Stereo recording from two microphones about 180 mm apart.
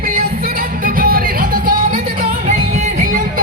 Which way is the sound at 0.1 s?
55° right (ahead or behind).